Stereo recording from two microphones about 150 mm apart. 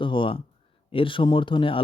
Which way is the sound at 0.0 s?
35° left (ahead or behind).